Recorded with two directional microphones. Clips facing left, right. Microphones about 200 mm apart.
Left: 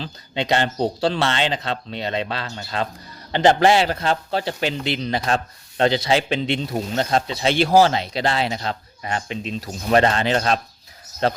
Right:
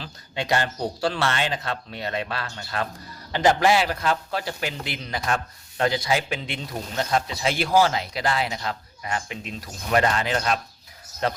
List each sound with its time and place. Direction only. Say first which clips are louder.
0.0 s a man's voice: left 5 dB; 25° left (ahead or behind)